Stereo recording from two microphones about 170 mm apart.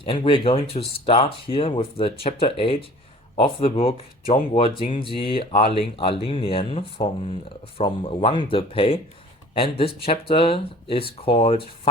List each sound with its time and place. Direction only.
0.0 s speech: 30° left (ahead or behind)